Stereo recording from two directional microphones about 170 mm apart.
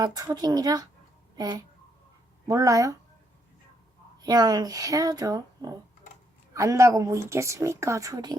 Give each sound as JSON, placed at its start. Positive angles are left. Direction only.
{"t": 0.0, "sound": "speech", "side_deg": -25}
{"t": 4.2, "sound": "speech", "side_deg": -25}